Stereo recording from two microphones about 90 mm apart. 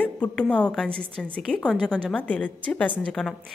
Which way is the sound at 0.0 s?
15° left (ahead or behind).